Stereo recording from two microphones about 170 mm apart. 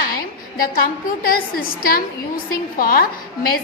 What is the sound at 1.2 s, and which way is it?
A woman's voice, 60° left (ahead or behind).